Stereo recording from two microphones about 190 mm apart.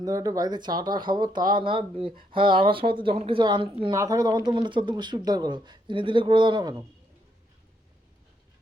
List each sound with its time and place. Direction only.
0.0 s speech: 20° right (ahead or behind)